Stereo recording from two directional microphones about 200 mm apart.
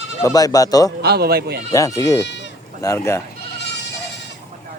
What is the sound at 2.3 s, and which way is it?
Bleat, 65° left (ahead or behind).